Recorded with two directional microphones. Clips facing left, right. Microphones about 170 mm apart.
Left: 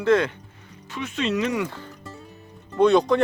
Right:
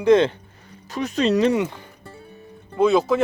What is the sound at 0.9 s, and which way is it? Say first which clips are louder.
Speech: right 6 dB; 40° right (ahead or behind).